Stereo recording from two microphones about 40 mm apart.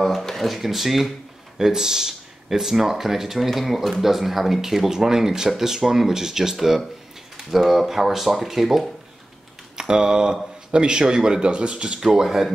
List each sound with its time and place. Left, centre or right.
0.0 s speech: centre
9.8 s speech: centre
12.1 s speech: centre